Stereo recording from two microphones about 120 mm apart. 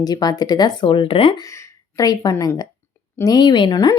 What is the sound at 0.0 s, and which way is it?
Speech, 35° left (ahead or behind).